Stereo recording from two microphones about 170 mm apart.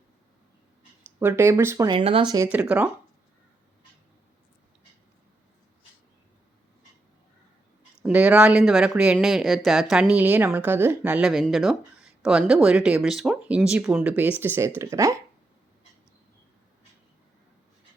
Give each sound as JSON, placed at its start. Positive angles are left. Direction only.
{"t": 1.2, "sound": "speech", "side_deg": -15}
{"t": 1.9, "sound": "speech", "side_deg": -30}
{"t": 2.5, "sound": "speech", "side_deg": -10}
{"t": 8.0, "sound": "speech", "side_deg": -5}